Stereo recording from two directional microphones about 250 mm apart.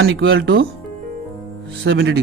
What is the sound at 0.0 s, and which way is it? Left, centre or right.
Speech, right.